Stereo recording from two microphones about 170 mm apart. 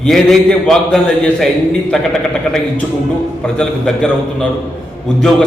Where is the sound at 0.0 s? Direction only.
Centre (ahead or behind).